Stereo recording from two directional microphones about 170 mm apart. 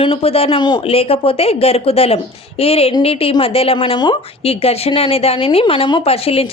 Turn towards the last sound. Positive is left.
turn(degrees=35)  # may be behind; listen again after turning